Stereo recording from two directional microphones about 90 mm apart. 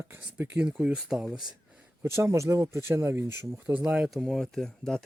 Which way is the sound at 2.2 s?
35° right (ahead or behind).